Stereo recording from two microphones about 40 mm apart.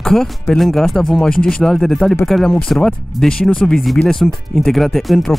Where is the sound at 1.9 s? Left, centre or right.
Centre.